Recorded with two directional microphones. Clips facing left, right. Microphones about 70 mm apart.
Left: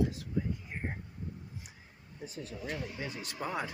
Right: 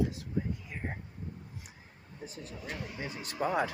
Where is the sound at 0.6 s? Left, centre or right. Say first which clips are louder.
Even; right.